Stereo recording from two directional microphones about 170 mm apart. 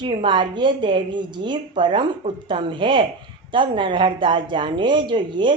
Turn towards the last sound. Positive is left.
turn(degrees=-30)  # may be behind; listen again after turning